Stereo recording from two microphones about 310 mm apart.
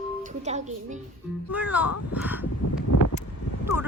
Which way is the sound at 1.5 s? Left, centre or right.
Centre.